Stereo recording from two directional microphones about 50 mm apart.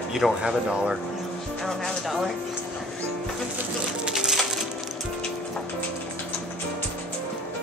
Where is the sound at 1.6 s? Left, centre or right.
Centre.